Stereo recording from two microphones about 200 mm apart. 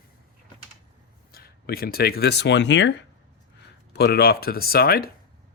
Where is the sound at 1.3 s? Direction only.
50° left (ahead or behind).